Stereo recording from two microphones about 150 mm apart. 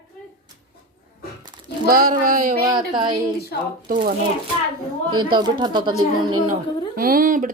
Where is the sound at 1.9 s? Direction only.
70° right (ahead or behind).